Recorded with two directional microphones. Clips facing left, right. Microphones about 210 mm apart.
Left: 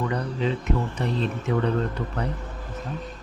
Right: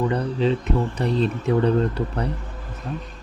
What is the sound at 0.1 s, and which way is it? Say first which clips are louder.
Speech: right 5 dB; 30° right (ahead or behind).